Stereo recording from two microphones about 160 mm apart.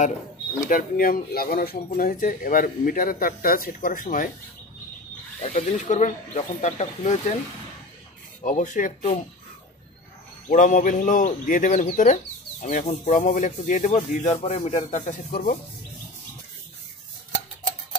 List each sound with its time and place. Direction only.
0.7 s speech: 60° left (ahead or behind)
5.4 s speech: 40° left (ahead or behind)
8.4 s speech: 50° left (ahead or behind)
10.5 s speech: 55° left (ahead or behind)